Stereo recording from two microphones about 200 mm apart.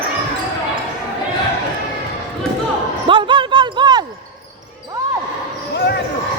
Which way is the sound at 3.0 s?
25° right (ahead or behind).